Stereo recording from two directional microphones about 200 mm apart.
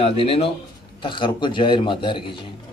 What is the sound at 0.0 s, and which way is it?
A man's voice, 30° left (ahead or behind).